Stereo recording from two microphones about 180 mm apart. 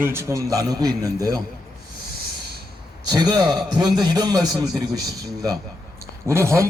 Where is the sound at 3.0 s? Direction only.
20° right (ahead or behind).